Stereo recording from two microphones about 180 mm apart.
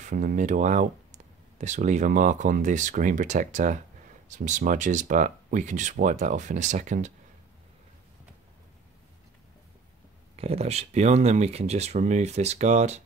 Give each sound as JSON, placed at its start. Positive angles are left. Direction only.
{"t": 0.0, "sound": "speech", "side_deg": -45}
{"t": 10.3, "sound": "speech", "side_deg": -35}